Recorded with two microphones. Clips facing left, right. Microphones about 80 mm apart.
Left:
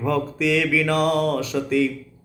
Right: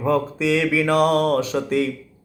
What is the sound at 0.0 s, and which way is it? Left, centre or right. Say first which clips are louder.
Mantra: right 2 dB; right.